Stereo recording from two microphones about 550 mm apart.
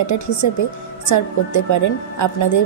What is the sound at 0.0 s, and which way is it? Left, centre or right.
Speech, left.